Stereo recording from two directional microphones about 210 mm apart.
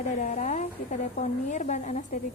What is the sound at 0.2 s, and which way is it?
A woman's voice, 35° left (ahead or behind).